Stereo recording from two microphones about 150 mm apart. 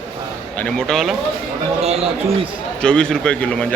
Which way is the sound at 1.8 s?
45° right (ahead or behind).